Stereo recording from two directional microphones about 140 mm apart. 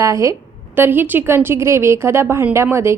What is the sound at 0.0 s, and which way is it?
A woman's voice, 25° right (ahead or behind).